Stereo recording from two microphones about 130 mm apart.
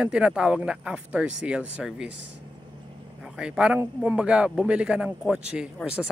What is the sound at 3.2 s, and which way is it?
A man's voice, 5° right (ahead or behind).